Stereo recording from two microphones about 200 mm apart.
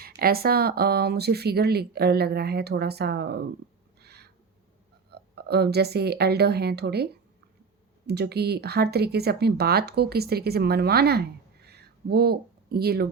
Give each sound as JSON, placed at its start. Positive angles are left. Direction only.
{"t": 0.0, "sound": "speech", "side_deg": -50}
{"t": 4.0, "sound": "owl", "side_deg": -55}
{"t": 5.3, "sound": "speech", "side_deg": -55}